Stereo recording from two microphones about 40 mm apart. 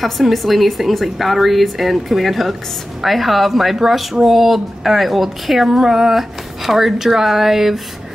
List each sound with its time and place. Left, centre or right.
0.0 s a woman's voice: centre